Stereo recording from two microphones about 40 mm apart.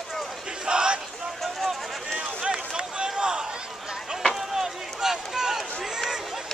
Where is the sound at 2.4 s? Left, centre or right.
Centre.